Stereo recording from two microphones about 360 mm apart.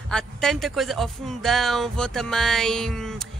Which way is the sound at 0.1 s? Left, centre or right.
Centre.